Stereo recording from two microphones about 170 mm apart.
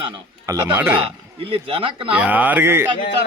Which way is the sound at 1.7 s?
30° right (ahead or behind).